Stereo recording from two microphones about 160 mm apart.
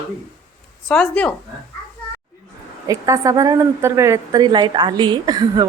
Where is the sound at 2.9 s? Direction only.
20° right (ahead or behind).